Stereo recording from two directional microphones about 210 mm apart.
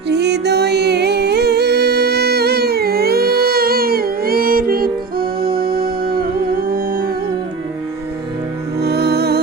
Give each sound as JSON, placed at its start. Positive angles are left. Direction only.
{"t": 0.1, "sound": "music", "side_deg": -55}
{"t": 8.8, "sound": "music", "side_deg": -50}